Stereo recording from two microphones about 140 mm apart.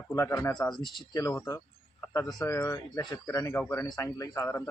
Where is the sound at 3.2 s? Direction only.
15° left (ahead or behind).